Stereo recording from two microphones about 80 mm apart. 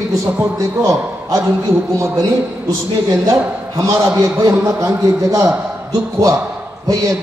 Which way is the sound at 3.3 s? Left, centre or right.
Right.